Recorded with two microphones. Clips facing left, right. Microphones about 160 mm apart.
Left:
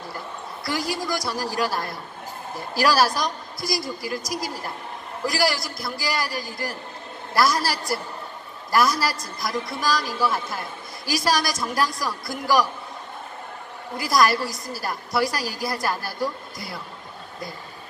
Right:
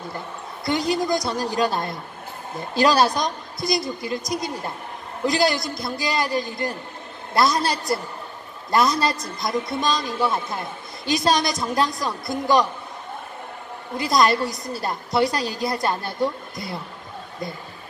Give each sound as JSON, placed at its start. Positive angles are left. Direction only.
{"t": 0.7, "sound": "a woman's voice", "side_deg": -20}
{"t": 13.9, "sound": "a woman's voice", "side_deg": -20}